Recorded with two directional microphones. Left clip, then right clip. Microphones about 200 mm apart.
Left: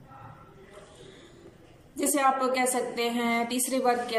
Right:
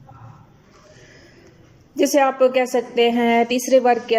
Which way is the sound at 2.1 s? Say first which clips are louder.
Right 8 dB; 45° right (ahead or behind).